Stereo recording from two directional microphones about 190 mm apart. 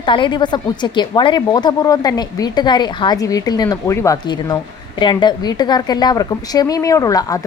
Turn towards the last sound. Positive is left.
turn(degrees=15)  # may be behind; listen again after turning